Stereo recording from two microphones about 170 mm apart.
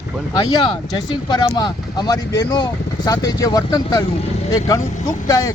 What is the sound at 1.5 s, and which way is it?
Speech, 25° left (ahead or behind).